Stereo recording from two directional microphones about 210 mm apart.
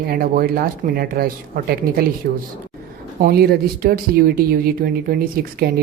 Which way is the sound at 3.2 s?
45° right (ahead or behind).